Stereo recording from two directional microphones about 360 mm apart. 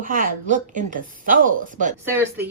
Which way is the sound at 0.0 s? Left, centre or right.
Right.